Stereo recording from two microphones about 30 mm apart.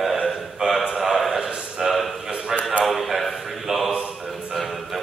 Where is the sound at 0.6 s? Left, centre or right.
Right.